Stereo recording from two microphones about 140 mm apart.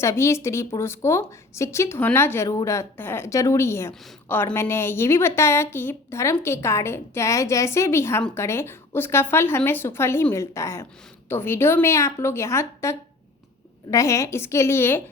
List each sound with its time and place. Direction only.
0.0 s a woman's voice: 20° left (ahead or behind)